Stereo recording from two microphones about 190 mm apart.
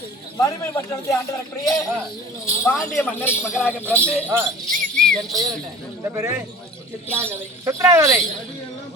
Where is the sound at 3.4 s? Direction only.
5° right (ahead or behind).